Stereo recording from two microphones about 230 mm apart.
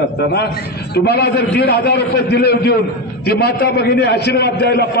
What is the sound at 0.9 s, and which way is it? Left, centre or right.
A man's voice, left.